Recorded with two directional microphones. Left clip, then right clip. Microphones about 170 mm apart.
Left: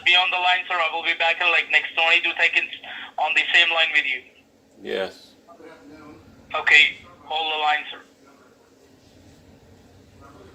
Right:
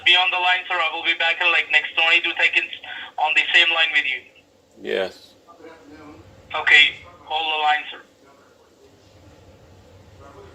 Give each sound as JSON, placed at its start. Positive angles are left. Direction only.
{"t": 0.0, "sound": "speech", "side_deg": 25}
{"t": 4.8, "sound": "speech", "side_deg": -5}
{"t": 7.3, "sound": "speech", "side_deg": 25}